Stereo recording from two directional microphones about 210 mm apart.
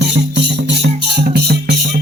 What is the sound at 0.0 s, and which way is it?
Music, 55° right (ahead or behind).